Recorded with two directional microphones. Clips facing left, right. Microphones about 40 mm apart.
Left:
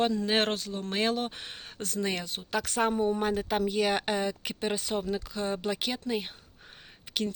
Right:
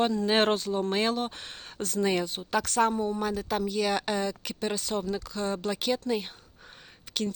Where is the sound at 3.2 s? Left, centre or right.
Left.